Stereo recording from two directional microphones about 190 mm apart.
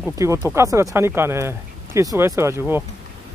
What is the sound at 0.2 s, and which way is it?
Speech, 15° right (ahead or behind).